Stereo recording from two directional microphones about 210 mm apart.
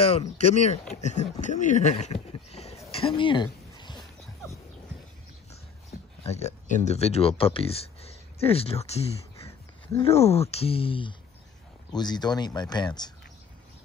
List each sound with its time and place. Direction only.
0.0 s speech: 30° left (ahead or behind)
2.9 s a sound: 25° left (ahead or behind)
5.9 s speech: 30° left (ahead or behind)